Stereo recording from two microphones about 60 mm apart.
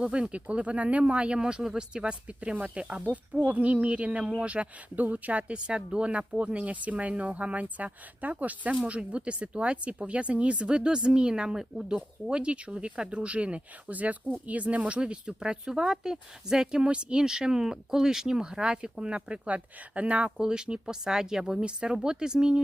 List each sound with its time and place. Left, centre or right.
0.0 s speech: centre